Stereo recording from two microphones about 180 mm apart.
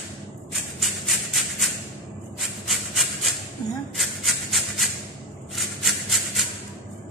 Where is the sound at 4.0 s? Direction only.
Centre (ahead or behind).